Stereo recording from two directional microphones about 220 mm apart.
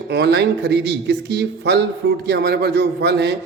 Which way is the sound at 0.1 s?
50° right (ahead or behind).